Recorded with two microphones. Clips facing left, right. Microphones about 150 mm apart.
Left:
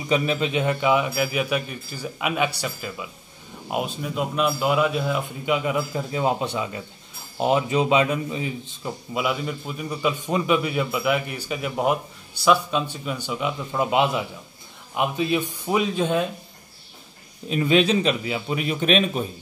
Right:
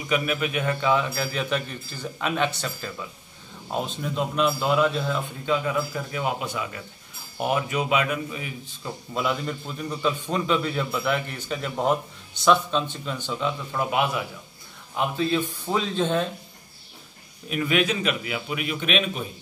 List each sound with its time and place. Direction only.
0.1 s a man's voice: 25° left (ahead or behind)
9.1 s a man's voice: 5° left (ahead or behind)
17.5 s a man's voice: 25° left (ahead or behind)